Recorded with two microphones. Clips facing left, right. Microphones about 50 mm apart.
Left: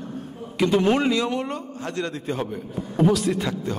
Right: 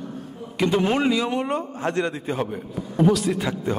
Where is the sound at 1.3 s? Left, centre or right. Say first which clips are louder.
Right 3 dB; centre.